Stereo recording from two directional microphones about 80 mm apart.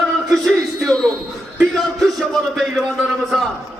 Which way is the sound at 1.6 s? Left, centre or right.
Centre.